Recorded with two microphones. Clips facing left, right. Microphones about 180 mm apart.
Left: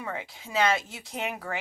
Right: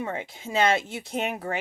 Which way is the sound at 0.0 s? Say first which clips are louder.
Right 4 dB; 25° right (ahead or behind).